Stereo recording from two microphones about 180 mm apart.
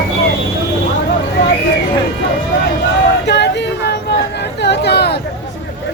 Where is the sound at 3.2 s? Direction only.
70° left (ahead or behind).